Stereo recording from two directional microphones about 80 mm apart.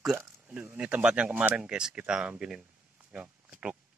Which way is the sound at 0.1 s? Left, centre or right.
Centre.